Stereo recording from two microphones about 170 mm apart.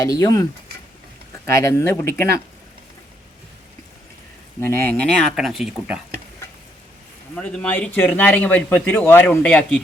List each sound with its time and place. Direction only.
0.0 s speech: 20° left (ahead or behind)
1.5 s speech: 15° left (ahead or behind)
4.6 s speech: 15° left (ahead or behind); by 6.0 s centre (ahead or behind)
7.3 s speech: 5° left (ahead or behind)